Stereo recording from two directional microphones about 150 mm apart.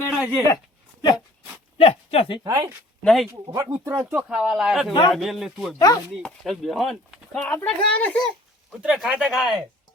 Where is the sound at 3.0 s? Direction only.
5° left (ahead or behind).